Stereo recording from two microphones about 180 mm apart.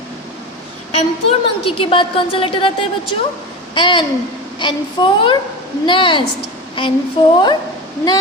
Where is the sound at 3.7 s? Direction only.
25° left (ahead or behind).